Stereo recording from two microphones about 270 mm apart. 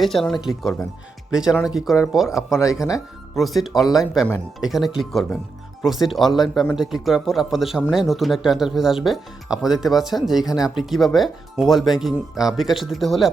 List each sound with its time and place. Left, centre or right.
0.0 s speech: centre